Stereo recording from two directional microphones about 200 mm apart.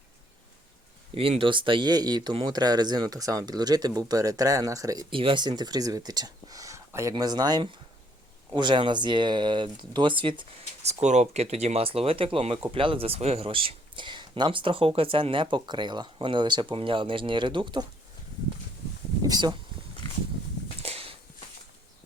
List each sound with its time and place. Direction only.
1.1 s speech: 30° right (ahead or behind)
19.3 s speech: 20° right (ahead or behind)
20.8 s walk: 30° right (ahead or behind)